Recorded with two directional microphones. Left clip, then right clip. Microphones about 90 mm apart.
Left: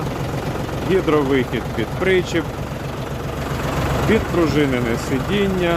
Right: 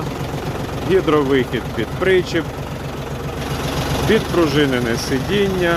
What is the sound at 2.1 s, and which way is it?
Speech, 25° left (ahead or behind).